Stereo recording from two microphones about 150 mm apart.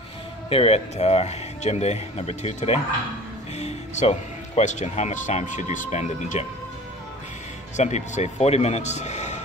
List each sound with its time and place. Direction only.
0.5 s speech: 40° left (ahead or behind)
7.7 s speech: 50° left (ahead or behind)